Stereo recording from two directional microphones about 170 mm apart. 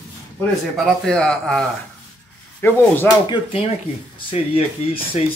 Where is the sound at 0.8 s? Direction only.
5° left (ahead or behind).